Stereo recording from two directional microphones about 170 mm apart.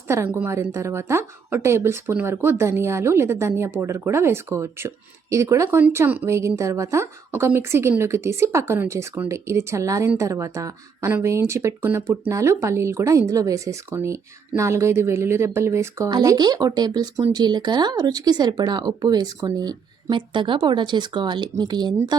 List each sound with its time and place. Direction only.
0.1 s speech: 10° right (ahead or behind)